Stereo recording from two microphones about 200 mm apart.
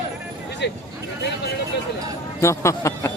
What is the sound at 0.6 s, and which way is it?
Speech, 60° left (ahead or behind).